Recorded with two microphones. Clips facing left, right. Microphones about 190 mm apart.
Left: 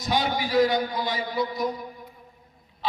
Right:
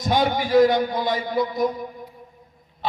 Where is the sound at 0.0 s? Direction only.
50° right (ahead or behind).